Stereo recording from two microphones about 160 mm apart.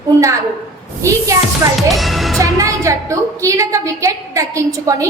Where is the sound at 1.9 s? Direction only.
Centre (ahead or behind).